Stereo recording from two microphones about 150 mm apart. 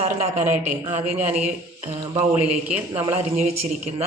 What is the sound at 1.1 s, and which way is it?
Speech, 10° right (ahead or behind).